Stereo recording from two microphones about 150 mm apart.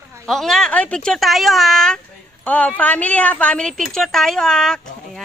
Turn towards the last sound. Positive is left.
turn(degrees=5)  # may be behind; listen again after turning